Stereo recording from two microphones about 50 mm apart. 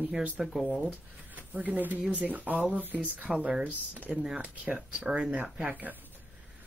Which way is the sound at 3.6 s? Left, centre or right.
Right.